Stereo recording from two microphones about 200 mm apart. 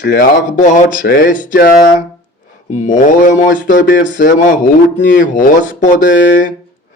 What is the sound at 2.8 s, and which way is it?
Speech, 40° left (ahead or behind).